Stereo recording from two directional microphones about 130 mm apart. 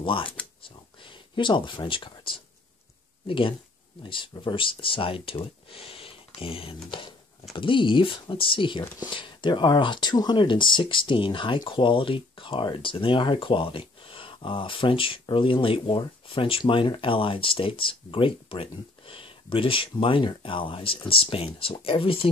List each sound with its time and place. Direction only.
0.0 s speech: 40° left (ahead or behind)
0.6 s a sound: 40° left (ahead or behind)
3.3 s speech: 40° left (ahead or behind)